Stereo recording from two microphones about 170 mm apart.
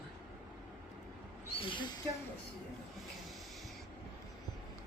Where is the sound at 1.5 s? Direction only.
30° left (ahead or behind).